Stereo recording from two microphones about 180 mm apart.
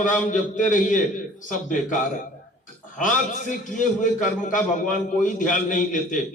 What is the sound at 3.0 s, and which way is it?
A man's voice, 45° left (ahead or behind).